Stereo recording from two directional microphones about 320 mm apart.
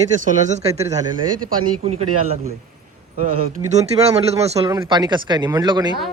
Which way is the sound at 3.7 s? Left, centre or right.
Centre.